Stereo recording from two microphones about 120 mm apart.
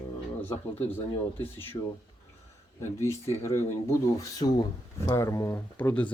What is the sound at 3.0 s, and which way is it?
Speech, 25° left (ahead or behind).